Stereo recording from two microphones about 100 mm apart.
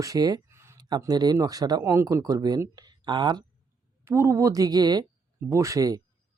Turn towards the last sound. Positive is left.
turn(degrees=-35)  # may be behind; listen again after turning